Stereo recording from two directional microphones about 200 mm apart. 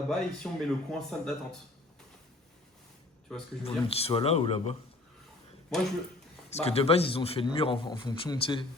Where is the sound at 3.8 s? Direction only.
30° left (ahead or behind).